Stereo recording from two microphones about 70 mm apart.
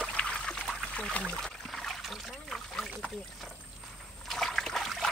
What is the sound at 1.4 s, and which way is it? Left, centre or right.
Rowboat, centre.